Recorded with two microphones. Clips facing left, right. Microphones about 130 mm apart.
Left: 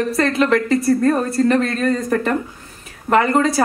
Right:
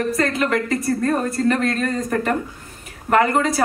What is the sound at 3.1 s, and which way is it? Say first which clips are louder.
Speech: left 2 dB; 30° left (ahead or behind).